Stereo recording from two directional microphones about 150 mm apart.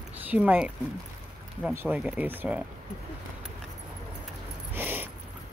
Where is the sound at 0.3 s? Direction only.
10° right (ahead or behind).